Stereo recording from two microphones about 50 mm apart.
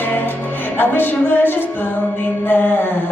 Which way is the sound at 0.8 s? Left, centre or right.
Left.